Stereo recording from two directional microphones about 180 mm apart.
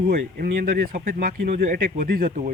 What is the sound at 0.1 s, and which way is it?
Speech, 65° right (ahead or behind).